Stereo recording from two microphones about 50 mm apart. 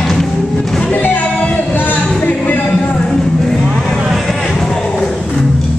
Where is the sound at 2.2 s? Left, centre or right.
Left.